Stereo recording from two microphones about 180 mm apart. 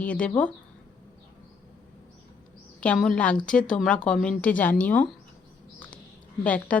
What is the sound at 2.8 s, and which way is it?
A woman's voice, 5° left (ahead or behind).